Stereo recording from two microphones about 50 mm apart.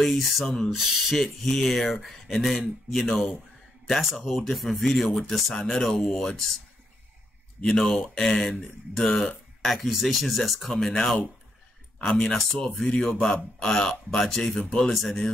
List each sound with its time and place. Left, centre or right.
0.0 s speech: centre
5.9 s speech: left
7.6 s speech: centre